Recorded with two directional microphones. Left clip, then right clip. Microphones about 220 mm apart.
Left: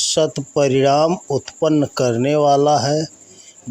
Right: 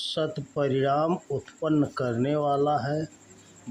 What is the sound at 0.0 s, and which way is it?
Speech, 30° left (ahead or behind).